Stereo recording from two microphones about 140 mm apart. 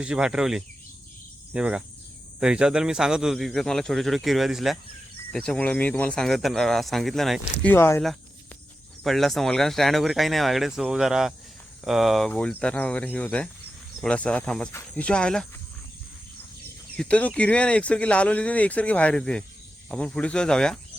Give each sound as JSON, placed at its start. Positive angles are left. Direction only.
{"t": 0.0, "sound": "a man's voice", "side_deg": -5}
{"t": 1.5, "sound": "cricket", "side_deg": -5}
{"t": 2.4, "sound": "a man's voice", "side_deg": -5}
{"t": 7.6, "sound": "speech", "side_deg": 15}
{"t": 9.0, "sound": "a man's voice", "side_deg": 0}
{"t": 17.0, "sound": "a man's voice", "side_deg": 10}